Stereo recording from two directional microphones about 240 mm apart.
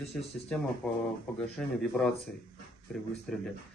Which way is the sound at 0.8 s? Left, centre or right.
Centre.